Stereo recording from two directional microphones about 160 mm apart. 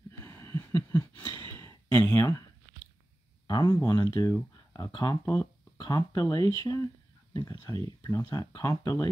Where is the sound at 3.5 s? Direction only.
20° left (ahead or behind).